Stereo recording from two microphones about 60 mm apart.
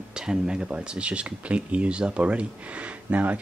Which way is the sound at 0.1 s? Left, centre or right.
Centre.